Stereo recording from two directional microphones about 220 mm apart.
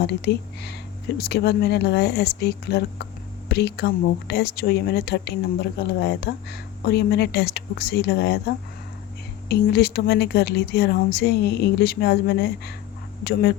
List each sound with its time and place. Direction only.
0.1 s a woman's voice: 50° left (ahead or behind)